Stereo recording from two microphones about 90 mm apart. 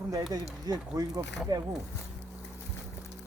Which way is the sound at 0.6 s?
45° right (ahead or behind).